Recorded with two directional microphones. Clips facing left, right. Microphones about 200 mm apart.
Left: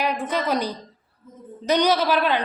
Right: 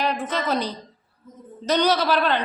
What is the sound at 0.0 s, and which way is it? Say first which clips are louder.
A woman's voice: left 1 dB; 10° left (ahead or behind).